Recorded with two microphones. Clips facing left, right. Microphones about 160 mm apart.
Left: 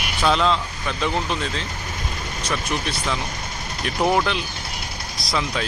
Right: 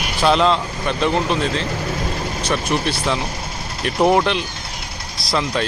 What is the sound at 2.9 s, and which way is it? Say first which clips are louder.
Speech: right 5 dB; centre (ahead or behind).